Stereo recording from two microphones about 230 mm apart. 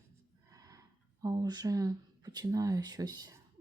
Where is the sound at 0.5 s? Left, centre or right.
Centre.